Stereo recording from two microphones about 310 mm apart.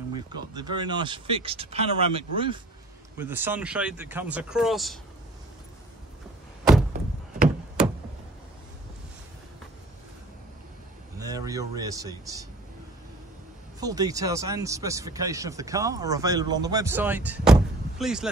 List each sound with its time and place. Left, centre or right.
0.1 s speech: centre
11.1 s speech: centre
13.7 s speech: centre